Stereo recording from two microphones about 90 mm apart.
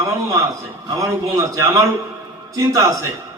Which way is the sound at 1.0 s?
35° right (ahead or behind).